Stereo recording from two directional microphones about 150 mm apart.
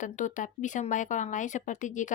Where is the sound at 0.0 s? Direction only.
55° left (ahead or behind).